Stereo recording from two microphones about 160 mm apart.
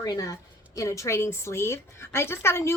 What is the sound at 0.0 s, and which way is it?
A woman's voice, 25° left (ahead or behind).